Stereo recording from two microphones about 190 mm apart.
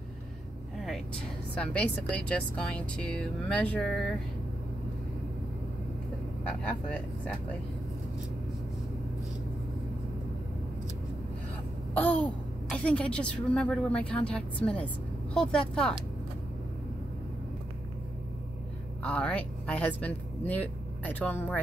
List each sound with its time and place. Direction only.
1.6 s speech: 5° left (ahead or behind)
11.9 s a sound: 10° left (ahead or behind)
12.7 s speech: 5° left (ahead or behind)
19.0 s speech: 5° left (ahead or behind)